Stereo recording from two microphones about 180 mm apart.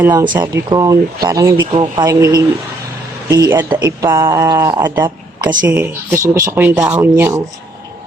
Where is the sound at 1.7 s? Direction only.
25° right (ahead or behind); by 7.4 s 10° right (ahead or behind).